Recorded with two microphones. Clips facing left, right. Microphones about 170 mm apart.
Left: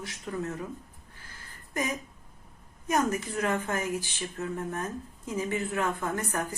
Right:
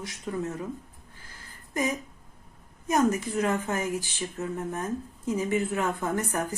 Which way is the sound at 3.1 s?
25° right (ahead or behind).